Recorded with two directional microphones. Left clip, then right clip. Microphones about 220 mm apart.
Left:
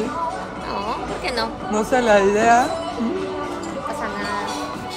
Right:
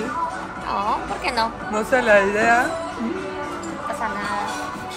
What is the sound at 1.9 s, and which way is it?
Speech, 35° left (ahead or behind).